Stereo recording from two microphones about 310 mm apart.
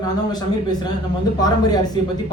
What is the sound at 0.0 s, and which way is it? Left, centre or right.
A man's voice, centre.